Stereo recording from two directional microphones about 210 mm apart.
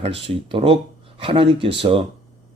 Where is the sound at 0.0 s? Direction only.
25° right (ahead or behind).